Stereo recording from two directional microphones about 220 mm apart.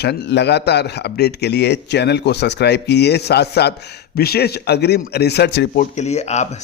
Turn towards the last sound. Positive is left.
turn(degrees=30)  # may be behind; listen again after turning